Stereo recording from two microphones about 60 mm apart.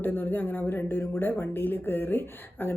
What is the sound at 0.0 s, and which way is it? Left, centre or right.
Speech, left.